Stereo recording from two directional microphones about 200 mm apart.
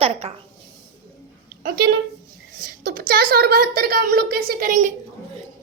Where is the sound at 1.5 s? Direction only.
50° right (ahead or behind).